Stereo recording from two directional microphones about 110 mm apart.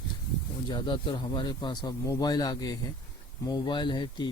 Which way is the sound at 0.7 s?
45° left (ahead or behind).